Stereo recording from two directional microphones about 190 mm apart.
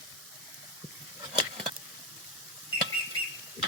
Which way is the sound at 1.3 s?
30° right (ahead or behind).